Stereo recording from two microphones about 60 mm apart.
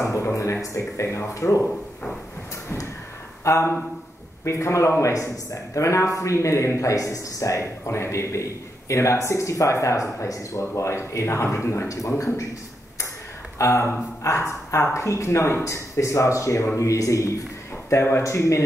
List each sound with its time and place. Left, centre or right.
0.0 s speech: left
3.4 s a man's voice: left
10.8 s speech: left
13.6 s a man's voice: left
17.8 s speech: left
18.2 s a man's voice: left